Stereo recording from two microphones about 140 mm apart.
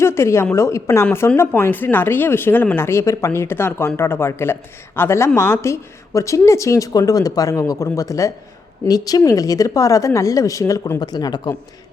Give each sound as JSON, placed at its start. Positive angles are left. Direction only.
{"t": 0.0, "sound": "a woman's voice", "side_deg": 20}